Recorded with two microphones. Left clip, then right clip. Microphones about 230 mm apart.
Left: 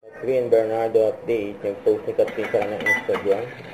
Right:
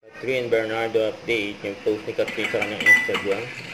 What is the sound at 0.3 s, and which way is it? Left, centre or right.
Speech, right.